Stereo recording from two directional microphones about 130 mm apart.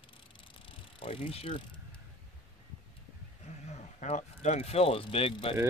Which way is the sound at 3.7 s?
60° left (ahead or behind).